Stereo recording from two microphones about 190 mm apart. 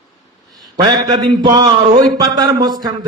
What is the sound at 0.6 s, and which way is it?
A man's voice, 20° right (ahead or behind).